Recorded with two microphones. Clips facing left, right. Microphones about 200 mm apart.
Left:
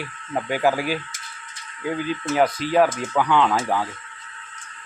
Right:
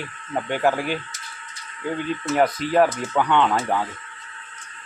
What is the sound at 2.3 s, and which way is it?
A man's voice, centre (ahead or behind).